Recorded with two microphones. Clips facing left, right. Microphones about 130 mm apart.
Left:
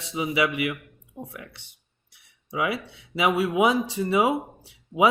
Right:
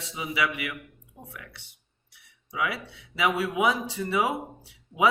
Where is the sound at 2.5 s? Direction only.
25° left (ahead or behind).